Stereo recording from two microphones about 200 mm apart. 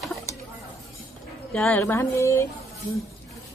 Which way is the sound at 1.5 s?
10° left (ahead or behind).